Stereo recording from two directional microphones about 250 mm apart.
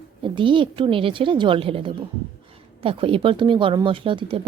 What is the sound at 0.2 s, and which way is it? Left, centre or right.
Speech, centre.